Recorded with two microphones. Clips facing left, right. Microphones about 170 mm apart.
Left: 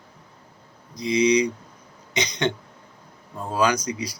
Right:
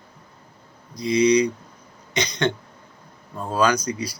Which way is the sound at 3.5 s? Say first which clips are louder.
Right 2 dB; 20° left (ahead or behind).